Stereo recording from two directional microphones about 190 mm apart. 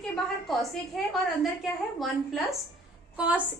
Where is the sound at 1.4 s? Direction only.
Centre (ahead or behind).